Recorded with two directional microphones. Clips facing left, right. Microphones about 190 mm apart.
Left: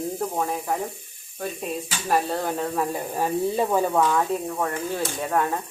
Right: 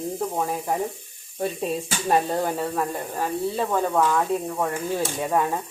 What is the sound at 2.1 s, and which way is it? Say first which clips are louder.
Speech: right 2 dB; 15° right (ahead or behind).